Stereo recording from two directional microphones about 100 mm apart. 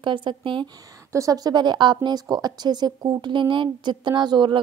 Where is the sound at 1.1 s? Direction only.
35° right (ahead or behind).